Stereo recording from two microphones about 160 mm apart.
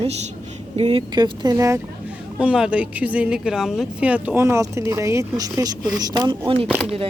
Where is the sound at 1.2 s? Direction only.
25° right (ahead or behind).